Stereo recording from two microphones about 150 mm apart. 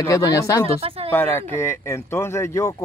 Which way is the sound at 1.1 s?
15° left (ahead or behind).